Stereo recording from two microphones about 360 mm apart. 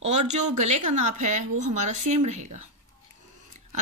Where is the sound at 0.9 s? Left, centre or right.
Centre.